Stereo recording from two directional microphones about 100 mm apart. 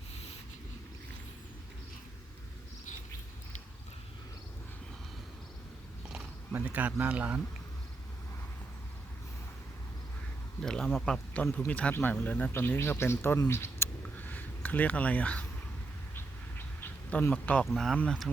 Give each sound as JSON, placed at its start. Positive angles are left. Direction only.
{"t": 6.5, "sound": "speech", "side_deg": -15}
{"t": 10.6, "sound": "speech", "side_deg": 5}
{"t": 13.5, "sound": "a sound", "side_deg": 25}
{"t": 16.1, "sound": "bird", "side_deg": 20}
{"t": 17.7, "sound": "speech", "side_deg": 0}